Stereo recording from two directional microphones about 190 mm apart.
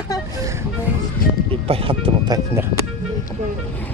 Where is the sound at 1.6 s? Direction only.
30° right (ahead or behind).